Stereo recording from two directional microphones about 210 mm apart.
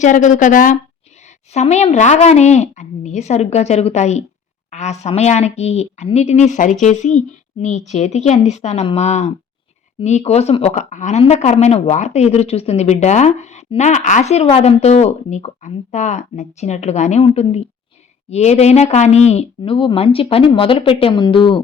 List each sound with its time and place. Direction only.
0.0 s a woman's voice: 35° left (ahead or behind)